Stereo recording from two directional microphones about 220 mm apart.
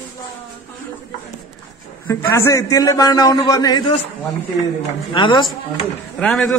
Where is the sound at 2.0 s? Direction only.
10° left (ahead or behind).